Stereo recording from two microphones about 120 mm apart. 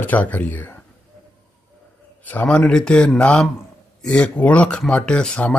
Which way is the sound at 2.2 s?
15° left (ahead or behind).